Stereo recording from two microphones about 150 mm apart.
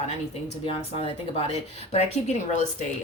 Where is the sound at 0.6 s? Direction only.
40° left (ahead or behind).